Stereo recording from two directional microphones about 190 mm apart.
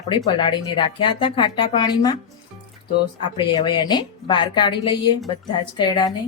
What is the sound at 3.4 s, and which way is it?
A woman's voice, 25° left (ahead or behind).